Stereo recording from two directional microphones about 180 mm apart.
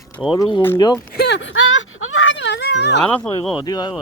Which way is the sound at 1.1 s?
70° left (ahead or behind).